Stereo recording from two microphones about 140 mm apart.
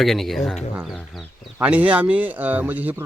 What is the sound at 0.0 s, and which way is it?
Speech, centre (ahead or behind).